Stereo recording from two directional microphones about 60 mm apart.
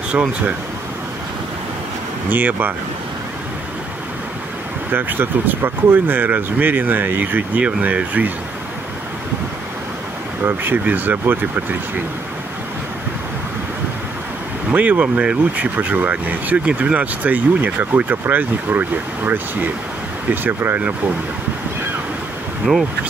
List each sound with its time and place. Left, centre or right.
2.2 s speech: right
4.9 s speech: right
10.4 s speech: right
14.7 s speech: right